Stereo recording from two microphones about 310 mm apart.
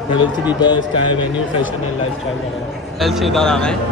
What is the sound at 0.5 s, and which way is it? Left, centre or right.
Speech, centre.